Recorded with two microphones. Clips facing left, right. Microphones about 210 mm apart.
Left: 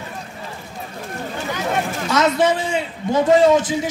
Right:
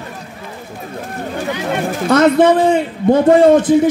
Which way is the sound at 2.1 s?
55° right (ahead or behind).